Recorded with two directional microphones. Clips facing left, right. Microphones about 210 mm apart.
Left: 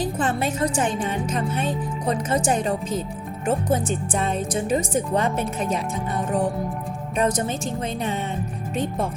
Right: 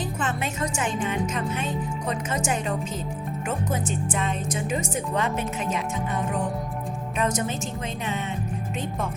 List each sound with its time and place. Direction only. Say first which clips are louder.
0.0 s speech: left 5 dB; 35° left (ahead or behind)
7.2 s speech: left 4 dB; 35° left (ahead or behind)